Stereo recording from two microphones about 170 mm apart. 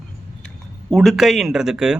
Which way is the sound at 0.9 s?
Centre (ahead or behind).